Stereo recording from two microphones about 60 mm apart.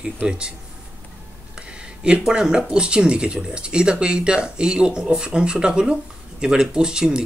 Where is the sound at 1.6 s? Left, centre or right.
Centre.